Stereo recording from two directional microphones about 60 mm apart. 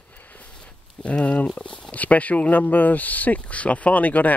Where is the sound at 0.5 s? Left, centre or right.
Centre.